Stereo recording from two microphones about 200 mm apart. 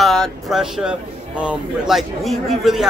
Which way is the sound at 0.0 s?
Centre (ahead or behind).